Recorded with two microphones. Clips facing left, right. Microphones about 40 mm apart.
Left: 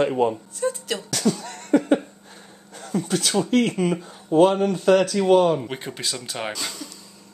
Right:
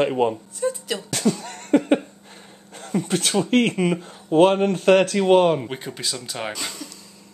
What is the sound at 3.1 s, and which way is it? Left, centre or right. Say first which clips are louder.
Speech: right 1 dB; right.